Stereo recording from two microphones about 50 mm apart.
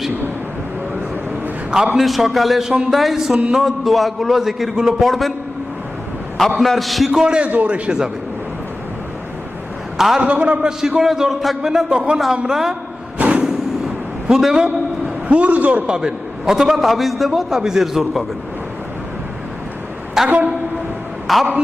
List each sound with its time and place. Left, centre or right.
2.0 s a man's voice: centre
2.6 s a man's voice: centre
2.9 s a man's voice: centre
6.6 s a man's voice: centre
7.1 s a man's voice: centre
10.2 s a man's voice: right
10.6 s a man's voice: centre
13.1 s a sound: right
13.4 s a sound: centre
14.5 s a man's voice: centre
15.3 s a man's voice: right
15.9 s a man's voice: centre
20.2 s a man's voice: right
21.3 s a man's voice: centre